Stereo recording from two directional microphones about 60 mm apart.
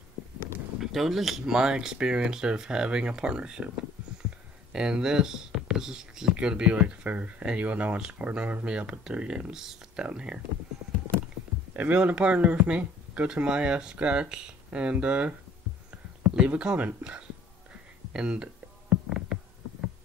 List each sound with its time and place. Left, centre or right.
0.7 s speech: centre
4.7 s speech: centre
11.7 s speech: right
16.4 s speech: centre
18.1 s a sound: centre